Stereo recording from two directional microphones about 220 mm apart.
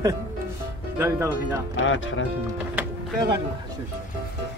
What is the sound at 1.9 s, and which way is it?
Speech, 60° left (ahead or behind).